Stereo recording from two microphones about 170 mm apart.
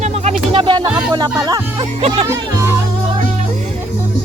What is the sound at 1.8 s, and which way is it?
Speech, 35° right (ahead or behind).